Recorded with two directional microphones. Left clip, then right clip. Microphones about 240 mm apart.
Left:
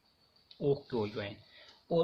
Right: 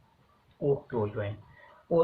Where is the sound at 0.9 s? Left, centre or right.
Left.